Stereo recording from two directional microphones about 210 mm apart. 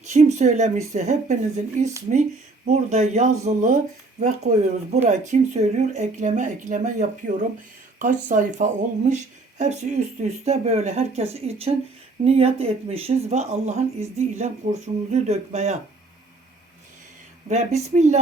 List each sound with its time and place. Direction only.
0.0 s speech: 35° right (ahead or behind)
17.5 s speech: 30° right (ahead or behind)